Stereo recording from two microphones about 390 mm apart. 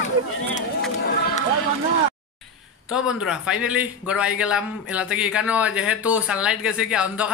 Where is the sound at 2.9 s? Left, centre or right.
Centre.